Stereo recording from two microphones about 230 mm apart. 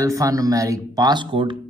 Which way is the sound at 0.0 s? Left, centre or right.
Centre.